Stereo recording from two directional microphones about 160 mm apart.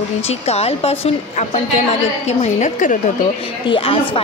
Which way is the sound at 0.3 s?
40° left (ahead or behind).